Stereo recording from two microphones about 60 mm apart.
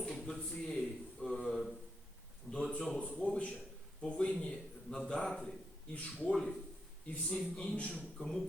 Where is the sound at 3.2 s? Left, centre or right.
Left; by 6.5 s centre.